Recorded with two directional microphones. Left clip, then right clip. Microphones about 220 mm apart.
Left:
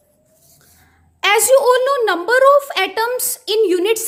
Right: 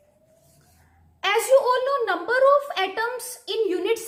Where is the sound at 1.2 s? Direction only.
45° left (ahead or behind).